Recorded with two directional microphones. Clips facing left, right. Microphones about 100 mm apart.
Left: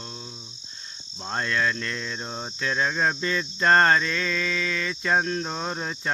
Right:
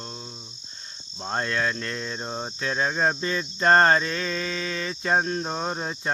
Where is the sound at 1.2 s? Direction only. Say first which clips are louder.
Even; 30° right (ahead or behind).